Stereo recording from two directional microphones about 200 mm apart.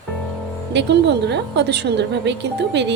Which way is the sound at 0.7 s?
60° right (ahead or behind).